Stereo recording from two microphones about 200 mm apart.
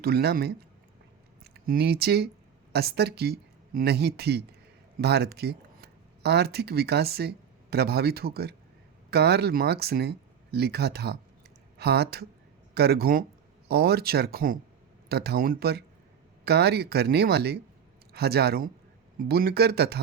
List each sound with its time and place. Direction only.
0.0 s speech: 50° right (ahead or behind)
1.6 s speech: 50° right (ahead or behind)